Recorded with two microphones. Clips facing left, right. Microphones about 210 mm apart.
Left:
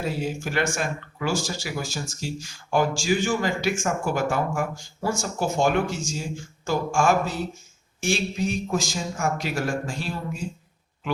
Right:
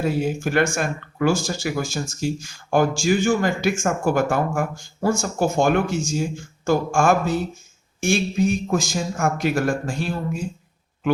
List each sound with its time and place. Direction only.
0.0 s speech: 55° right (ahead or behind)